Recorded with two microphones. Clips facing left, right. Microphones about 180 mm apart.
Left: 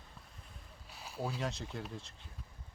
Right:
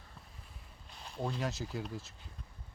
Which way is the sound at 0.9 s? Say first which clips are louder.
Right 1 dB; 5° left (ahead or behind).